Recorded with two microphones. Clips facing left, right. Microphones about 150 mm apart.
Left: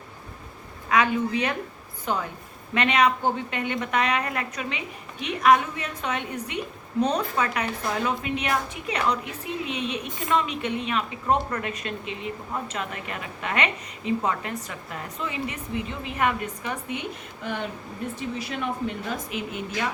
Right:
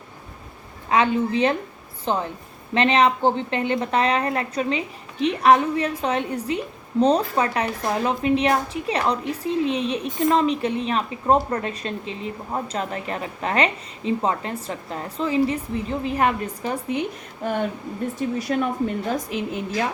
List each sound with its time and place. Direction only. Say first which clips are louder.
0.9 s a woman's voice: right 3 dB; 30° right (ahead or behind); by 19.1 s 45° right (ahead or behind)